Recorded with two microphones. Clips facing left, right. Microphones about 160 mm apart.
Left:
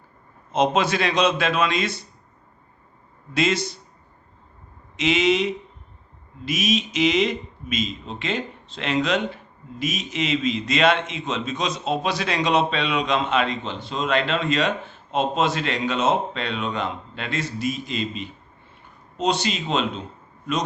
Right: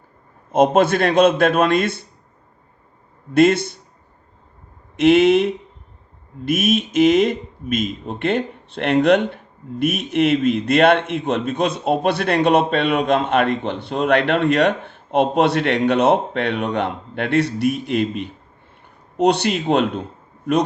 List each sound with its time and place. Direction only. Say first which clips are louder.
0.5 s a man's voice: right 6 dB; 55° right (ahead or behind)
3.3 s speech: right 8 dB; 55° right (ahead or behind)
4.9 s speech: right 8 dB; 55° right (ahead or behind)